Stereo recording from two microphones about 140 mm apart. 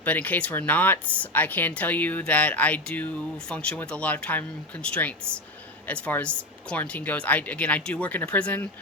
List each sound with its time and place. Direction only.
0.0 s speech: 10° left (ahead or behind)